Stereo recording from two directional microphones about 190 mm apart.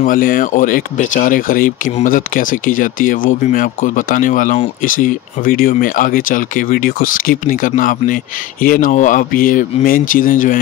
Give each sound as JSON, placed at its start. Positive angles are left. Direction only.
{"t": 0.0, "sound": "speech", "side_deg": 45}